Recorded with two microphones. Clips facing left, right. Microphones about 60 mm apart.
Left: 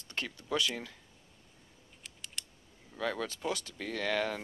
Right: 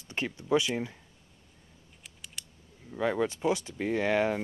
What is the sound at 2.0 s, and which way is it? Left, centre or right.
Scissors, centre.